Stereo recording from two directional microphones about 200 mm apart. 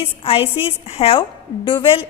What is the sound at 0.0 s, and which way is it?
A woman's voice, 25° left (ahead or behind).